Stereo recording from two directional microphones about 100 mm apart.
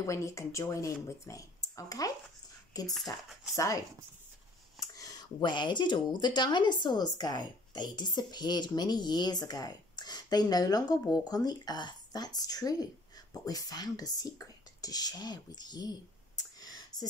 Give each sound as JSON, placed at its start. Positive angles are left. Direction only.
{"t": 0.0, "sound": "speech", "side_deg": 30}
{"t": 16.5, "sound": "clicking", "side_deg": 40}